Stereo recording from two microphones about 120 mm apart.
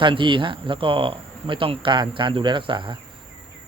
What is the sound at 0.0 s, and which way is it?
Speech, 45° right (ahead or behind).